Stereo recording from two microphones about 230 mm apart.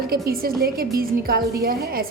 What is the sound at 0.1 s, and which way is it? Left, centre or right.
A woman's voice, right.